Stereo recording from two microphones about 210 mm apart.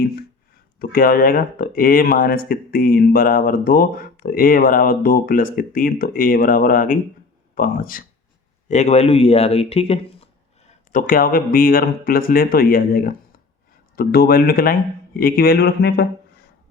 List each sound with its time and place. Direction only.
0.8 s speech: 45° left (ahead or behind); by 10.2 s 30° left (ahead or behind)
10.9 s speech: 40° left (ahead or behind)